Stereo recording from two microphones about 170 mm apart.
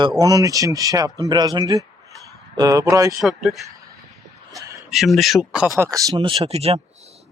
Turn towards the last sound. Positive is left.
turn(degrees=-35)  # may be behind; listen again after turning